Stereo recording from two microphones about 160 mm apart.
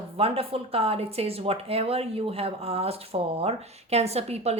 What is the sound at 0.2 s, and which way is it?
Speech, 35° right (ahead or behind).